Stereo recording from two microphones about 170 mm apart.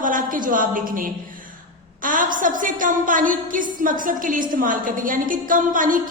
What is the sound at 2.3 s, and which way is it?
A woman's voice, 50° right (ahead or behind).